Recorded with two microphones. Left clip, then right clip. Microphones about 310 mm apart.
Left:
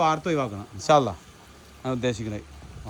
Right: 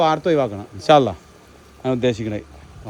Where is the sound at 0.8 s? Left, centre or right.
Right.